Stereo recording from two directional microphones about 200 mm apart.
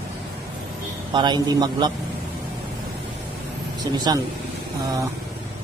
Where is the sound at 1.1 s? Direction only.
20° right (ahead or behind).